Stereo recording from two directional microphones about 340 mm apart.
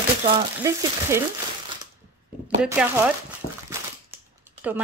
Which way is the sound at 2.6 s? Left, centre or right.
Centre.